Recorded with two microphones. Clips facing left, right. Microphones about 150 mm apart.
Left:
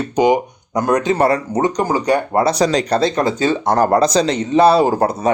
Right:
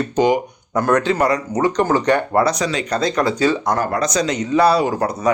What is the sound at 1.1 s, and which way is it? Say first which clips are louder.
Speech: left 3 dB; 30° left (ahead or behind).